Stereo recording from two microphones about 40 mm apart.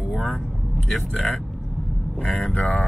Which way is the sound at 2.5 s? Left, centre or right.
Left.